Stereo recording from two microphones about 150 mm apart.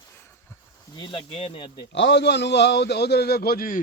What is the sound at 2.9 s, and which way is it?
Speech, 90° left.